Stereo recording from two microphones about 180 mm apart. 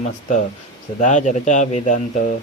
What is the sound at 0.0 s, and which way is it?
Speech, 45° left (ahead or behind).